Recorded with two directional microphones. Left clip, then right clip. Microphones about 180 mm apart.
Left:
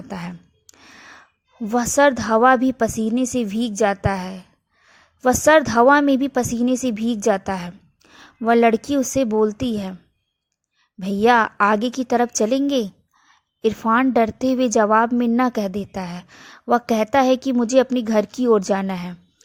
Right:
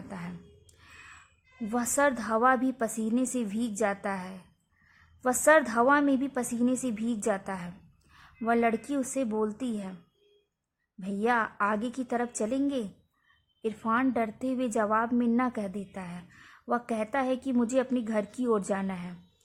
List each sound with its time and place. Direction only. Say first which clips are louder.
0.1 s a sound: left 12 dB; 35° left (ahead or behind)
1.7 s a woman's voice: left 11 dB; 35° left (ahead or behind)
11.0 s a woman's voice: left 12 dB; 40° left (ahead or behind)